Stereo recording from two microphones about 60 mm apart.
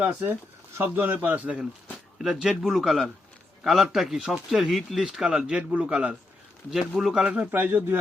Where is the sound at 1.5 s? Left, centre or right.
Centre.